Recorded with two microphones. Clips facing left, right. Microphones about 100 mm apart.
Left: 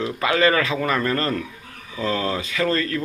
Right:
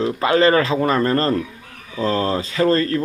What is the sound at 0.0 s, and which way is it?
Speech, 30° right (ahead or behind).